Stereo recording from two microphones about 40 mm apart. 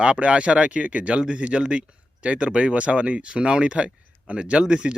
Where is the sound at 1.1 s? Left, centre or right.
Right.